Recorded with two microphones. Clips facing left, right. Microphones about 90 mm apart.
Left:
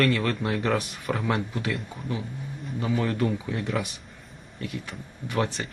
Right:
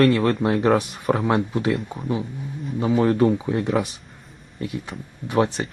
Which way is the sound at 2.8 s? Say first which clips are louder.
Right 8 dB; 25° right (ahead or behind).